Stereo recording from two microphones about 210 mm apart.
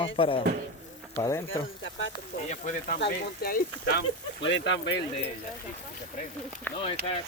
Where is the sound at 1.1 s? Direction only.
15° left (ahead or behind).